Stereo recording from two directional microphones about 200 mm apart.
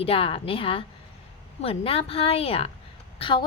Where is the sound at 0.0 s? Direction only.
30° left (ahead or behind).